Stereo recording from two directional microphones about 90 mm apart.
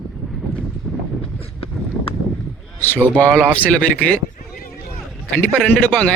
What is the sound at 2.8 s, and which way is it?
Speech, 20° left (ahead or behind).